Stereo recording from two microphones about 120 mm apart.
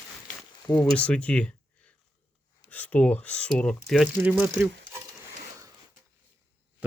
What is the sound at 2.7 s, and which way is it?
Speech, 15° left (ahead or behind).